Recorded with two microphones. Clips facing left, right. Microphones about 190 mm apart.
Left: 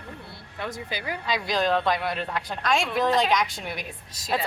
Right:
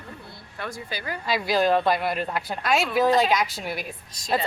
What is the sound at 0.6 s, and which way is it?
Speech, 20° left (ahead or behind).